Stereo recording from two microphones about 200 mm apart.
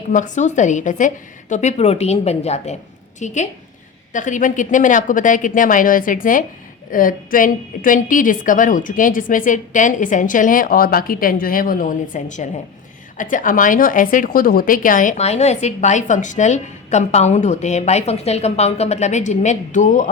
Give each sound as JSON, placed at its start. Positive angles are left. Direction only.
{"t": 0.1, "sound": "a woman's voice", "side_deg": 40}